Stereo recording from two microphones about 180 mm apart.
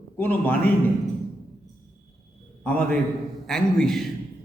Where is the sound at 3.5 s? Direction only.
5° left (ahead or behind).